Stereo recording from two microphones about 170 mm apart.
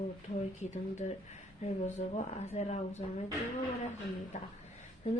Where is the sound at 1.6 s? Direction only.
40° left (ahead or behind).